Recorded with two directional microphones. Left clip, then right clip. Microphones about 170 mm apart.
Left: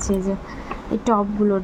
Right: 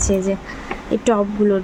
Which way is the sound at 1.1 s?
5° left (ahead or behind).